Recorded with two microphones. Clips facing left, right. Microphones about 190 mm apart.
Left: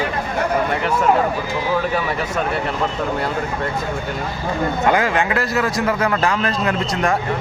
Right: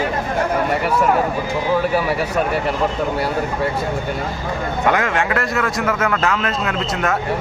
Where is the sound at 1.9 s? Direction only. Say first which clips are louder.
Right 3 dB; 10° right (ahead or behind).